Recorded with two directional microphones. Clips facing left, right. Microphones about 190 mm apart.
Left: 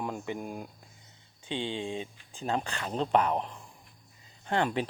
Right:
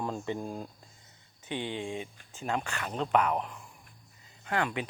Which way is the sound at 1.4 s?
25° left (ahead or behind).